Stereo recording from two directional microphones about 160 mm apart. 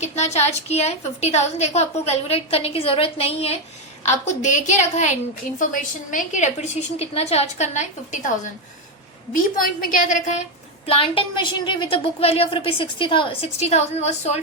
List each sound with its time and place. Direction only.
0.0 s a woman's voice: 45° left (ahead or behind)
4.0 s a woman's voice: 50° left (ahead or behind)
9.3 s a woman's voice: 60° left (ahead or behind)
10.8 s a woman's voice: 35° left (ahead or behind)